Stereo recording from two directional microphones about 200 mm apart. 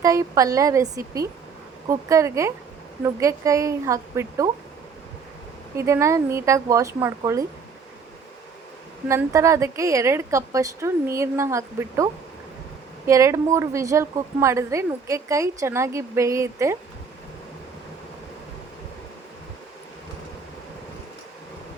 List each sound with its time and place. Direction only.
0.0 s a woman's voice: 15° right (ahead or behind)
5.7 s a woman's voice: 15° right (ahead or behind)
9.0 s a woman's voice: 15° right (ahead or behind)
13.1 s a woman's voice: 15° right (ahead or behind)